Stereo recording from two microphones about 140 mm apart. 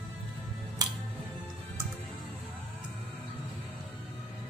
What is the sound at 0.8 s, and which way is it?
Music, 25° right (ahead or behind).